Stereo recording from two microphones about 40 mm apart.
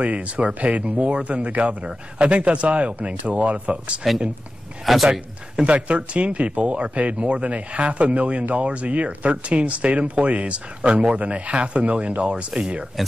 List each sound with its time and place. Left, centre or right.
0.0 s a man's voice: right
4.1 s a man's voice: centre
5.6 s a man's voice: right